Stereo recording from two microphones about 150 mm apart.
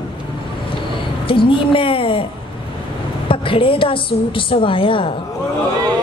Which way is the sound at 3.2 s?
35° left (ahead or behind).